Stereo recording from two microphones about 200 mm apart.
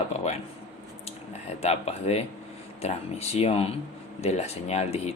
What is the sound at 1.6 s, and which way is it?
Speech, 30° left (ahead or behind).